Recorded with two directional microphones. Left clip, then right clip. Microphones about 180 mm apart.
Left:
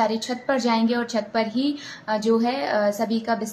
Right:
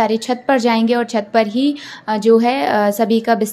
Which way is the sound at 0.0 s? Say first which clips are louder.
Right 7 dB; 40° right (ahead or behind).